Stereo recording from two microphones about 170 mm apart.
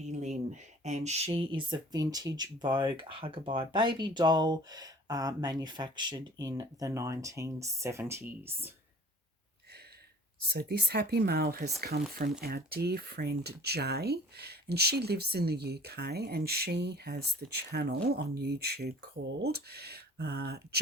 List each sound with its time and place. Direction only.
0.0 s speech: 45° right (ahead or behind); by 8.7 s 15° right (ahead or behind)
10.7 s speech: 70° right (ahead or behind)